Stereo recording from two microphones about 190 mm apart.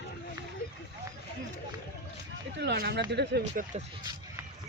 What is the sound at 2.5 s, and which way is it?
Speech, 65° right (ahead or behind).